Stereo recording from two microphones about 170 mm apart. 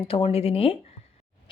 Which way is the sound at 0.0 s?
35° left (ahead or behind).